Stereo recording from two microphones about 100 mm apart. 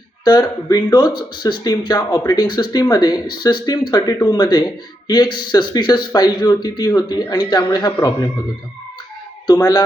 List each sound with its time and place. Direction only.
0.3 s speech: 40° left (ahead or behind)
9.5 s speech: 40° left (ahead or behind)